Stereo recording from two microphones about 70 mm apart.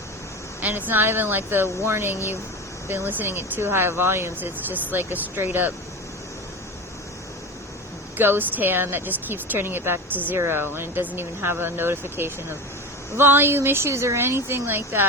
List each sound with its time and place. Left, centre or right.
0.6 s speech: right
8.2 s speech: right